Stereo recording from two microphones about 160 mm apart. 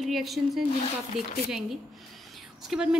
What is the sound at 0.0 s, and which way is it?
Speech, centre (ahead or behind).